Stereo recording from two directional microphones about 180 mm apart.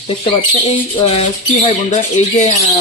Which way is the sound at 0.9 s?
35° left (ahead or behind).